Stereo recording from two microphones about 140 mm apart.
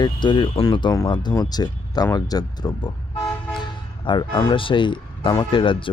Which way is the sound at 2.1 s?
25° left (ahead or behind).